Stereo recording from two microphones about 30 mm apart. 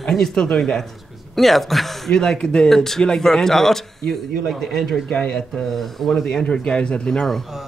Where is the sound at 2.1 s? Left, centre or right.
Left.